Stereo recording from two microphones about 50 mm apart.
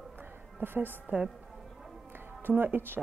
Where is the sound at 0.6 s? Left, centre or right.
Right.